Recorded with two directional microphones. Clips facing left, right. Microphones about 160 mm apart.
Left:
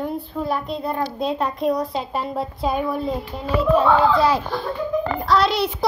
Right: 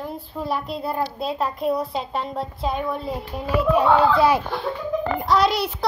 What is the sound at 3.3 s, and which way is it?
Speech, 10° right (ahead or behind).